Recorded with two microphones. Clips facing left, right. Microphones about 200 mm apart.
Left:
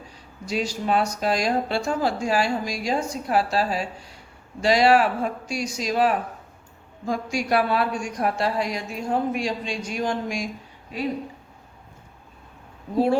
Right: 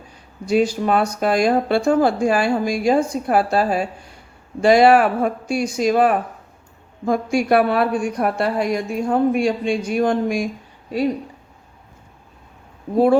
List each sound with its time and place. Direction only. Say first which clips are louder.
0.4 s speech: right 8 dB; 55° right (ahead or behind)